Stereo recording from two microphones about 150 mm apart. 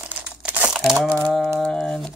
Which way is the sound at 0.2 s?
10° right (ahead or behind).